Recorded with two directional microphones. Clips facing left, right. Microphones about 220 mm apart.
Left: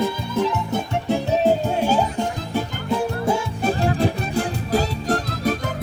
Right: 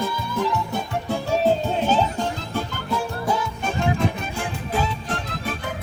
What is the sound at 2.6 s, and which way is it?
Music, 25° left (ahead or behind).